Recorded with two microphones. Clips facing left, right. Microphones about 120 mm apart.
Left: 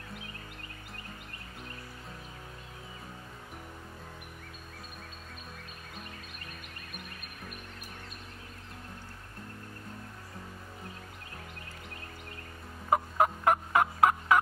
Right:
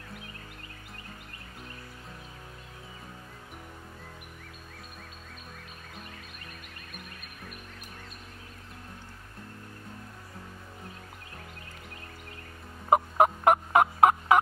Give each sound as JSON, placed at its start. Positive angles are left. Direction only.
{"t": 12.9, "sound": "fowl", "side_deg": -20}